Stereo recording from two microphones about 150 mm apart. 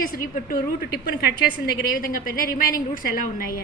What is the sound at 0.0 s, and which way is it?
Speech, 70° left (ahead or behind).